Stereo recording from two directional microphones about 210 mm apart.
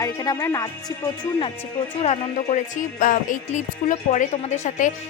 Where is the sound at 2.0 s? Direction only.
30° left (ahead or behind).